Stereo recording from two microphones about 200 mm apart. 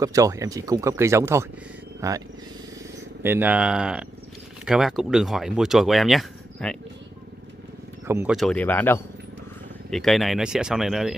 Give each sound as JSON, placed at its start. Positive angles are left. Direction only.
{"t": 0.0, "sound": "speech", "side_deg": -15}
{"t": 8.1, "sound": "speech", "side_deg": -10}
{"t": 8.4, "sound": "speech", "side_deg": 5}